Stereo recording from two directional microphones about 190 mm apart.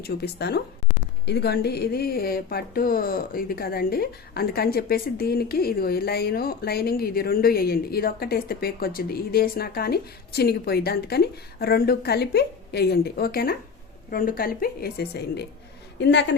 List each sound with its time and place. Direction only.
0.0 s speech: 60° left (ahead or behind)
16.0 s a woman's voice: 65° left (ahead or behind)